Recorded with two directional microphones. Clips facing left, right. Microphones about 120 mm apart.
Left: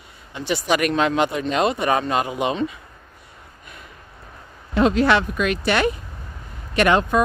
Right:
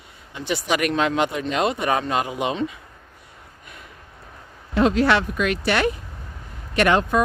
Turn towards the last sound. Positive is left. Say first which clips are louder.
# left 1 dB
turn(degrees=20)  # may be behind; listen again after turning